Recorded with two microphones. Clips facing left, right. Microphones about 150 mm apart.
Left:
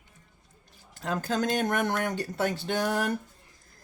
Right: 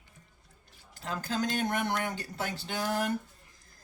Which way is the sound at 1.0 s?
50° left (ahead or behind).